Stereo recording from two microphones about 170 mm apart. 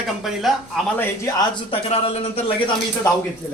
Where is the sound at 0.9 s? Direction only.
15° left (ahead or behind).